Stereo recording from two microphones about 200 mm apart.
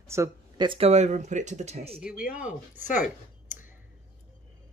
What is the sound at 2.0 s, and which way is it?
Speech, 5° right (ahead or behind).